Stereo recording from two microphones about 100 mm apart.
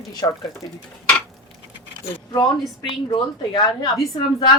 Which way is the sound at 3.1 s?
50° left (ahead or behind).